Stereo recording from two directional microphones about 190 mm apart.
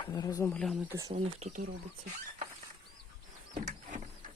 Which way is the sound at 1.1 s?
35° right (ahead or behind).